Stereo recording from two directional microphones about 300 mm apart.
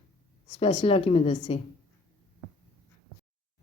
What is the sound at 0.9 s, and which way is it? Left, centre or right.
Speech, centre.